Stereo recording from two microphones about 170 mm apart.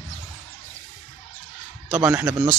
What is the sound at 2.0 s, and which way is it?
Speech, 15° right (ahead or behind).